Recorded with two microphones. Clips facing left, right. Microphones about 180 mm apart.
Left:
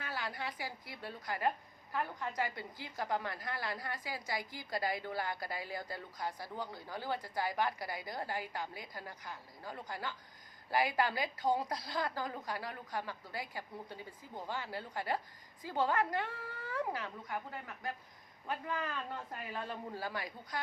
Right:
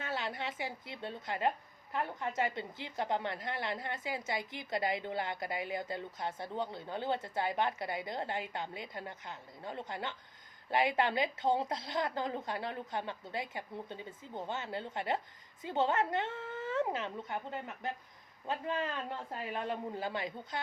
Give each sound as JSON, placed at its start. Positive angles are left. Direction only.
{"t": 0.0, "sound": "speech", "side_deg": -25}